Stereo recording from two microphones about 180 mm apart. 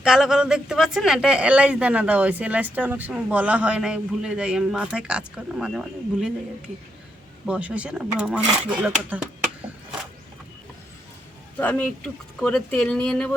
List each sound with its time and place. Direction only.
0.0 s speech: 5° right (ahead or behind)
7.4 s speech: 5° right (ahead or behind)
11.5 s speech: 10° left (ahead or behind)